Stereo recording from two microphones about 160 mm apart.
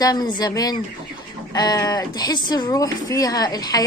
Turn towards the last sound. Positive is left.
turn(degrees=25)  # may be behind; listen again after turning